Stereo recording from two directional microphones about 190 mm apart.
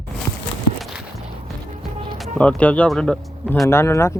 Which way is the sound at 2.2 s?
5° left (ahead or behind).